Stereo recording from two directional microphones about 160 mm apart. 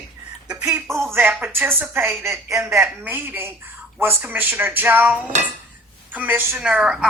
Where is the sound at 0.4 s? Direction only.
5° right (ahead or behind).